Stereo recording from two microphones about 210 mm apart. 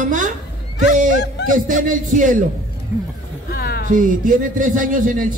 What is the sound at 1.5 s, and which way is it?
Speech, 40° right (ahead or behind).